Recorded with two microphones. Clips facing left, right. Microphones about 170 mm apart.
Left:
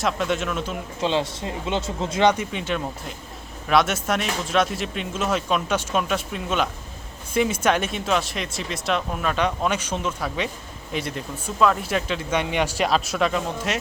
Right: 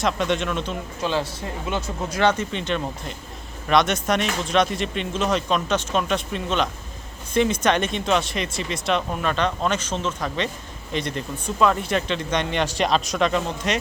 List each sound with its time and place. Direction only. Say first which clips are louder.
0.0 s speech: right 1 dB; 5° left (ahead or behind)
1.0 s speech: left 2 dB; 20° left (ahead or behind)
2.3 s speech: right 1 dB; 10° left (ahead or behind)